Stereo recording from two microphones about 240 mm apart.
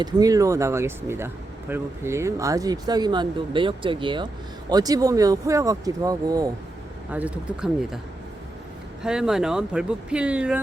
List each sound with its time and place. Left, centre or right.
0.0 s speech: centre
9.0 s speech: centre